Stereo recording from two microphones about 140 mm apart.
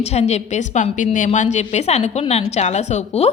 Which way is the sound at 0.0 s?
50° left (ahead or behind).